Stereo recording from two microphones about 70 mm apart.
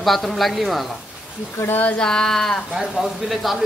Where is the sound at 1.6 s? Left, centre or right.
Left.